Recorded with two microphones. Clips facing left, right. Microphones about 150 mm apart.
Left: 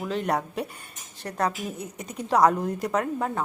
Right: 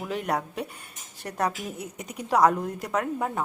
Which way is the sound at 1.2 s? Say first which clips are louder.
Left 1 dB; 10° right (ahead or behind).